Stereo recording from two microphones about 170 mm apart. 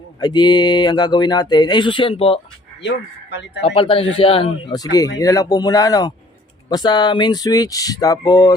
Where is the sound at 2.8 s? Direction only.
90° left.